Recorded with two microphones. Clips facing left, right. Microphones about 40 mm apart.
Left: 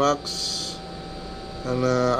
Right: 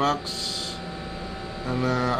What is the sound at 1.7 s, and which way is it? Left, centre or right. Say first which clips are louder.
Speech: left 3 dB; centre.